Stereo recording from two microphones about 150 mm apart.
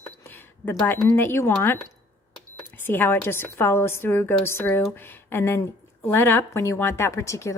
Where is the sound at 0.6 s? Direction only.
15° left (ahead or behind).